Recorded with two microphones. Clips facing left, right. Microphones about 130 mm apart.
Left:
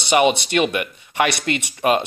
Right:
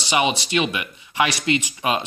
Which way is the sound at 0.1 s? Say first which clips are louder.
Left 4 dB; 55° left (ahead or behind).